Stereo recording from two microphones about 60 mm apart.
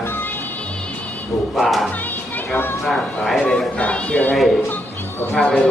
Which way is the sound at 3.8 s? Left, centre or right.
Centre.